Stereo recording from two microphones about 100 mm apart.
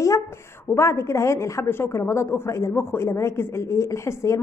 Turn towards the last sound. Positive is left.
turn(degrees=30)  # may be behind; listen again after turning